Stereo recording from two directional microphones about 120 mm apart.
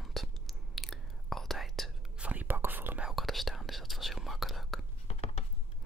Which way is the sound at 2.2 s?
15° right (ahead or behind).